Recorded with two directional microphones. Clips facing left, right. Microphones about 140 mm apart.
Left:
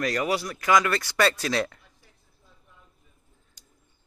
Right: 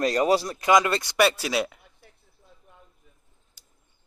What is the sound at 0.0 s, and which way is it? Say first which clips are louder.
Speech: right 5 dB; 30° right (ahead or behind).